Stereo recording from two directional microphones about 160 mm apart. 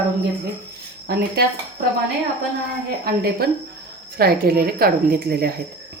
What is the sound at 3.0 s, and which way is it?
A woman's voice, 75° right (ahead or behind).